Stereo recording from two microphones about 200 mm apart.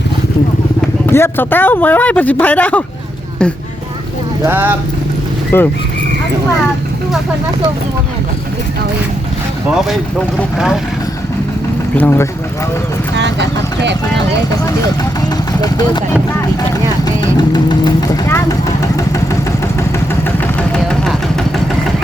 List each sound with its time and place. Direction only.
1.0 s speech: 10° left (ahead or behind)
4.4 s speech: 10° right (ahead or behind)
5.5 s speech: 10° left (ahead or behind)
11.9 s speech: 10° left (ahead or behind)
13.1 s vehicle: 60° right (ahead or behind)
15.6 s speech: 20° left (ahead or behind)
17.1 s vehicle: 20° left (ahead or behind)
20.2 s vehicle: 5° left (ahead or behind)